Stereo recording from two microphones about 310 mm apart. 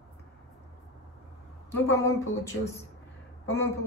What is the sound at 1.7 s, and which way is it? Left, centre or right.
Speech, centre.